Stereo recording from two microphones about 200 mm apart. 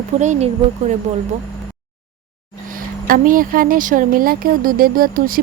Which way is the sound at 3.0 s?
45° right (ahead or behind).